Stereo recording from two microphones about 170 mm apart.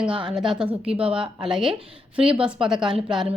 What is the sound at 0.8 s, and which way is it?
Speech, 35° right (ahead or behind).